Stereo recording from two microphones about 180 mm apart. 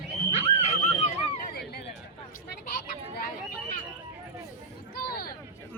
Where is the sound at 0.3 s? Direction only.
35° left (ahead or behind).